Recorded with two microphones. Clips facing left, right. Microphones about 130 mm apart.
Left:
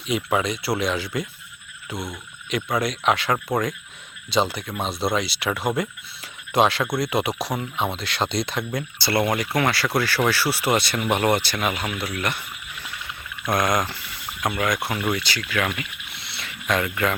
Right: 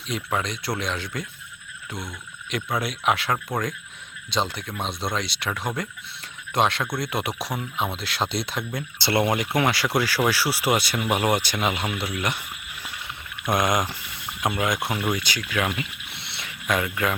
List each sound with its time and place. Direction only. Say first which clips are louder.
0.1 s speech: left 5 dB; 5° left (ahead or behind)
2.5 s speech: left 3 dB; centre (ahead or behind)
9.0 s speech: even; 20° right (ahead or behind)
15.8 s a sound: right 1 dB; 25° right (ahead or behind)
16.6 s speech: left 1 dB; 5° right (ahead or behind)